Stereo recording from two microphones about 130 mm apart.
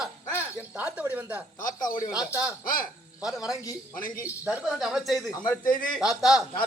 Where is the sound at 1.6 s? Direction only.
90° left.